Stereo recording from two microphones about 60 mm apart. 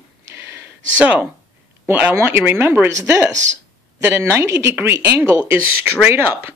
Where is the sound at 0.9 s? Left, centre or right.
Right.